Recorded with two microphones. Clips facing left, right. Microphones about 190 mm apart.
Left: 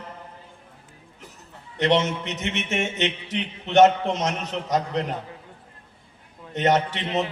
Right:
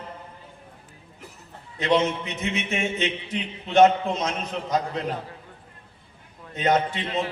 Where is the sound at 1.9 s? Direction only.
85° left.